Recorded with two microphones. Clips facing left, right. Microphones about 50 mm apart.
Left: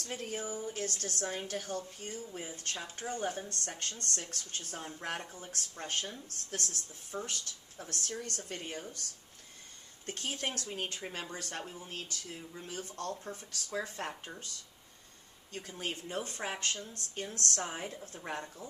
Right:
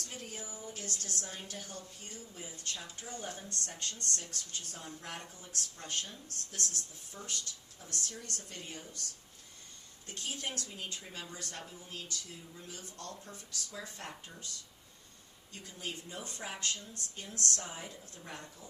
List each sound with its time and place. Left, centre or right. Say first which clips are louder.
0.0 s a woman's voice: left 7 dB; left
6.6 s speech: right 3 dB; right
7.3 s a woman's voice: left 1 dB; left
10.1 s a woman's voice: left 3 dB; left
15.7 s a woman's voice: left 5 dB; left